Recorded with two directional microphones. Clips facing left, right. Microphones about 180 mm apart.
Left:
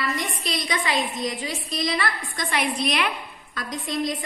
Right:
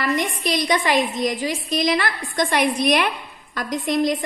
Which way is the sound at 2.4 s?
45° right (ahead or behind).